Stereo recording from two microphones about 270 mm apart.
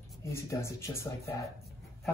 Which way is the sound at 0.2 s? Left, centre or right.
Centre.